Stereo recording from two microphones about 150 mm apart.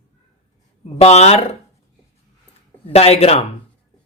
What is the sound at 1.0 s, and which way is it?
Speech, 45° left (ahead or behind).